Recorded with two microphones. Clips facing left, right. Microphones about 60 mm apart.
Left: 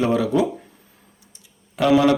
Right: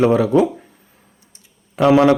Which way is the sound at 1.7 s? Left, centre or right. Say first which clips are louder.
Right 4 dB; right.